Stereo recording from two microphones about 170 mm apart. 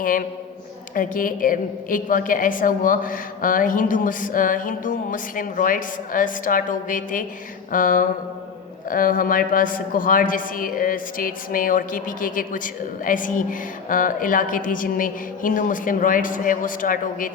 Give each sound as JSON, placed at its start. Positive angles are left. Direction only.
{"t": 0.0, "sound": "speech", "side_deg": 50}